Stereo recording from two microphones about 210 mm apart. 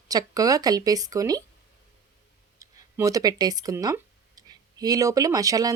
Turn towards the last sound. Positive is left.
turn(degrees=-15)  # may be behind; listen again after turning